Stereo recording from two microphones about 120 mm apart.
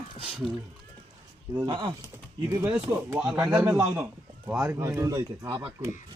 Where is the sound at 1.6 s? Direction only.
40° right (ahead or behind).